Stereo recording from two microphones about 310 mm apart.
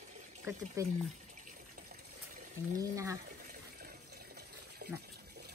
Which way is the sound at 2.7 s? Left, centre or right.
Centre.